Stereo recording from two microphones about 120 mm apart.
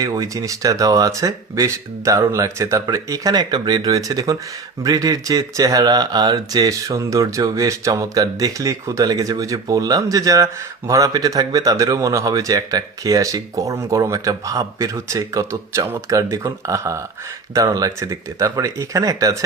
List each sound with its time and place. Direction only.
0.0 s speech: 30° right (ahead or behind)